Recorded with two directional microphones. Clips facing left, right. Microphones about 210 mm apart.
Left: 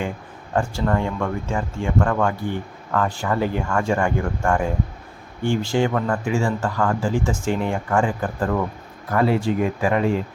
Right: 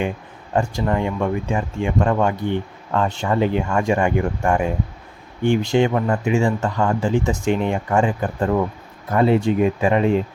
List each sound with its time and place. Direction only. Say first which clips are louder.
0.5 s speech: right 1 dB; 15° right (ahead or behind)